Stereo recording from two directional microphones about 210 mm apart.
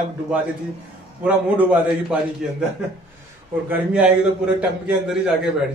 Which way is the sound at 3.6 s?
5° right (ahead or behind).